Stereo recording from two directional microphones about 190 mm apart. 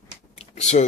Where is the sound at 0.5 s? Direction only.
35° left (ahead or behind).